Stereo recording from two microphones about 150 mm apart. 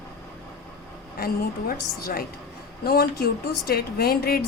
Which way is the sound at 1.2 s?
90° left.